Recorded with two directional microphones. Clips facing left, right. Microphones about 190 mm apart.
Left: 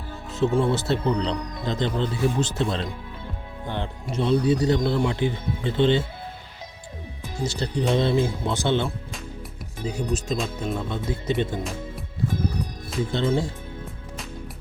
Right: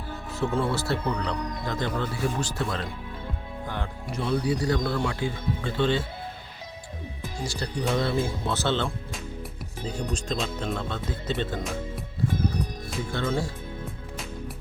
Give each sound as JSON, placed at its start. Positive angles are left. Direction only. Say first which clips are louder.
{"t": 0.3, "sound": "speech", "louder": "left 5 dB", "side_deg": 20}
{"t": 7.2, "sound": "speech", "louder": "left 5 dB", "side_deg": 25}
{"t": 13.1, "sound": "speech", "louder": "left 4 dB", "side_deg": 20}